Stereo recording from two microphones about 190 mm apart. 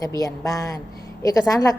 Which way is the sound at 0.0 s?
20° left (ahead or behind).